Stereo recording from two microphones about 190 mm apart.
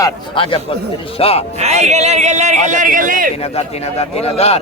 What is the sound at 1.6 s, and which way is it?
A man's voice, 35° right (ahead or behind).